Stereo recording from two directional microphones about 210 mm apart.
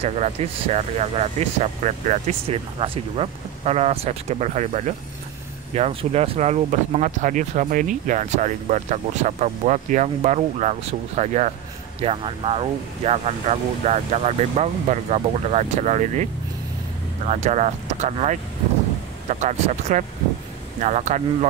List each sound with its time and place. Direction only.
0.0 s speech: 30° right (ahead or behind)
17.3 s speech: 35° right (ahead or behind)